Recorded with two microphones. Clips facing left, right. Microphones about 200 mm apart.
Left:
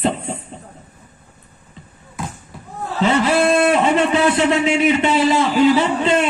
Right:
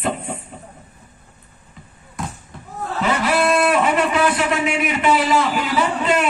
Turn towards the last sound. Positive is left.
turn(degrees=25)  # may be behind; listen again after turning